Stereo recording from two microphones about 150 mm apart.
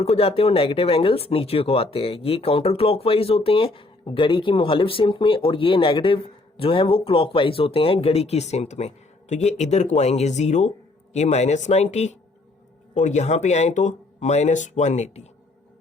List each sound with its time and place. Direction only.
0.0 s speech: 40° left (ahead or behind)